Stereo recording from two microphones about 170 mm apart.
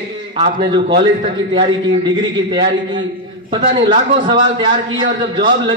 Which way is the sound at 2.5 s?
30° right (ahead or behind).